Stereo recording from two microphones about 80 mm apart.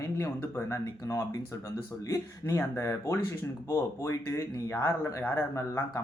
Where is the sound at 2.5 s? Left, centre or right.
Left.